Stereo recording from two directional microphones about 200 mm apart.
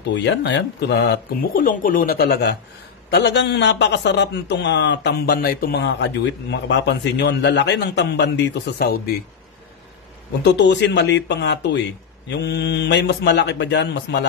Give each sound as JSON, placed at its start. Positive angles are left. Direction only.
{"t": 0.1, "sound": "a man's voice", "side_deg": 65}
{"t": 10.4, "sound": "a man's voice", "side_deg": 60}